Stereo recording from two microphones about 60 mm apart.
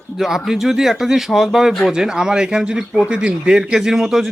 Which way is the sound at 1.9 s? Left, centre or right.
Centre.